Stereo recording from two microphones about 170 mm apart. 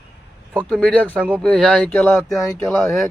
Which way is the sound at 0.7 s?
5° left (ahead or behind).